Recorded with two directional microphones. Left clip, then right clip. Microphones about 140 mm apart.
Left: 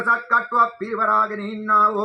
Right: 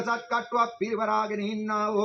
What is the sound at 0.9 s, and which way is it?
Speech, 5° left (ahead or behind).